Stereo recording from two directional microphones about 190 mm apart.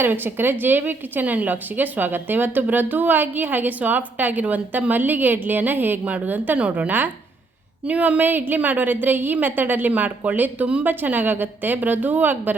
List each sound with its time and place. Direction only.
0.0 s speech: 10° right (ahead or behind)